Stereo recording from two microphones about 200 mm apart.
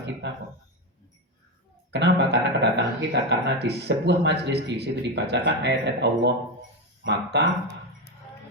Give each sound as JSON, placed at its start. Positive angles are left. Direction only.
{"t": 0.2, "sound": "speech", "side_deg": -60}
{"t": 1.9, "sound": "speech", "side_deg": -60}